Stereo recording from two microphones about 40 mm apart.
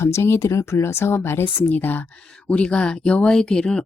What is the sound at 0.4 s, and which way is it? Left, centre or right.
Speech, left.